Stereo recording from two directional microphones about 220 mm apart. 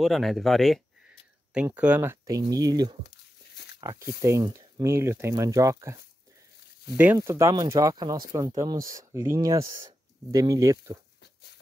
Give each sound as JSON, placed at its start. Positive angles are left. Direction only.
{"t": 0.0, "sound": "speech", "side_deg": 0}
{"t": 7.0, "sound": "speech", "side_deg": -10}